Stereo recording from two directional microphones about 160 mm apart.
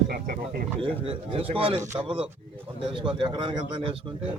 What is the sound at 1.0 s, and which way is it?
A man's voice, 35° right (ahead or behind).